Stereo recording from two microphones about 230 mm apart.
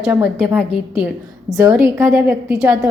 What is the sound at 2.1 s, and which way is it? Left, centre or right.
Speech, centre.